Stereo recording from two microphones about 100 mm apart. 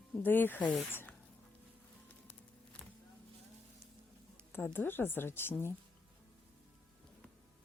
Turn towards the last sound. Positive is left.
turn(degrees=20)  # may be behind; listen again after turning